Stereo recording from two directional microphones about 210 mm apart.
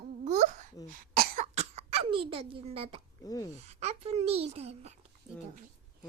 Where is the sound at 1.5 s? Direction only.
30° right (ahead or behind).